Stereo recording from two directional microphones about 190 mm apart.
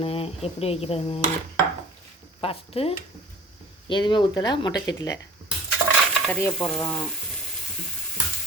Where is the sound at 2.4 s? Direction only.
30° left (ahead or behind).